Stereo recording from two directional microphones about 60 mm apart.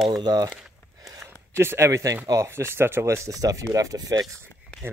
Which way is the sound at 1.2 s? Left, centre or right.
Right.